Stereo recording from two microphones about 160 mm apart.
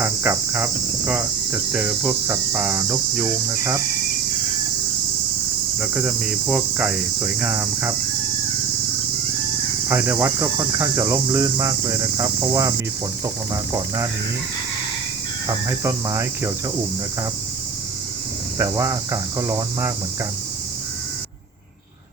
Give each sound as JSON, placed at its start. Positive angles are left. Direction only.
{"t": 0.0, "sound": "cricket", "side_deg": -10}
{"t": 5.8, "sound": "cricket", "side_deg": -5}
{"t": 9.9, "sound": "cricket", "side_deg": -10}
{"t": 13.2, "sound": "speech", "side_deg": -20}
{"t": 15.4, "sound": "cricket", "side_deg": -20}
{"t": 18.5, "sound": "cricket", "side_deg": -15}